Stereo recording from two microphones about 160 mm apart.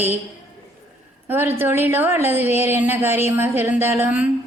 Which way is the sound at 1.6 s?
15° right (ahead or behind).